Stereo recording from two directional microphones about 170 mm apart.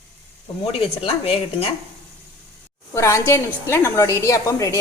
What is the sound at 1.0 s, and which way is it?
Speech, 35° left (ahead or behind).